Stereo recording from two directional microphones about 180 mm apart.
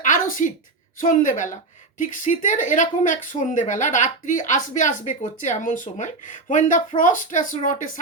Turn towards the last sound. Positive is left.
turn(degrees=45)  # may be behind; listen again after turning